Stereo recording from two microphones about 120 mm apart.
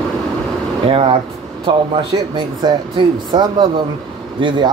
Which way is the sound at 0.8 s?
55° right (ahead or behind).